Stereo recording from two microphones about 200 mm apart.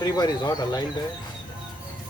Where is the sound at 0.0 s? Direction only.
20° left (ahead or behind).